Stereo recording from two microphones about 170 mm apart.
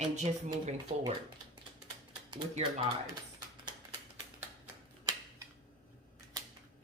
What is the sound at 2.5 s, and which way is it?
Speech, 40° right (ahead or behind).